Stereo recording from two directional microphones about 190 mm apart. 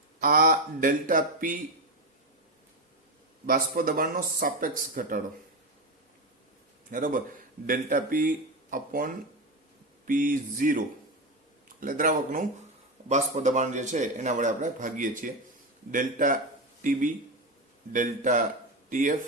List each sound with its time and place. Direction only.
0.2 s speech: 45° right (ahead or behind)
3.4 s speech: 45° right (ahead or behind)
6.9 s speech: 45° right (ahead or behind)
10.1 s a man's voice: 45° right (ahead or behind)